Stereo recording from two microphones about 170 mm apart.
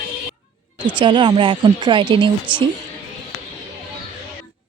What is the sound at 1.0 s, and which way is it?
Speech, 30° right (ahead or behind).